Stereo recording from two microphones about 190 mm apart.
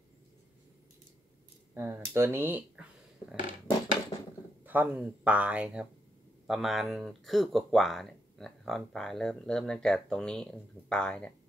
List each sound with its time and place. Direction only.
1.7 s speech: 10° right (ahead or behind)
4.1 s a sound: 25° left (ahead or behind)
4.6 s speech: 10° right (ahead or behind)